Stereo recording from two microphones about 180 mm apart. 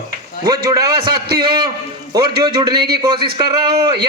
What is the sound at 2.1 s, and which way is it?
Speech, 25° right (ahead or behind).